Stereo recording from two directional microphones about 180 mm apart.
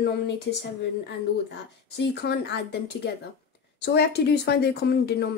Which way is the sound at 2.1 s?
70° left (ahead or behind).